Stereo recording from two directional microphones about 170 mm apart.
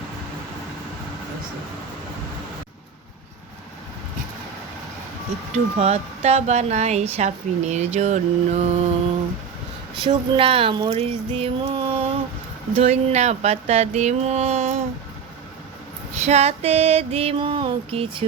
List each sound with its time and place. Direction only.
5.5 s speech: 40° right (ahead or behind)
10.0 s speech: 35° right (ahead or behind)
11.8 s a sound: 35° right (ahead or behind)
12.7 s speech: 35° right (ahead or behind)
16.2 s speech: 40° right (ahead or behind)